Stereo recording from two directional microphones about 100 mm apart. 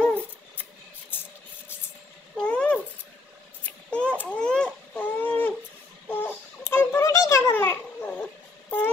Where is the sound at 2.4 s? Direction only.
10° left (ahead or behind).